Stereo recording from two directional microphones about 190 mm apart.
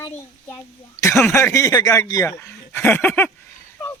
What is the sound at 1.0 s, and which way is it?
Speech, 15° left (ahead or behind).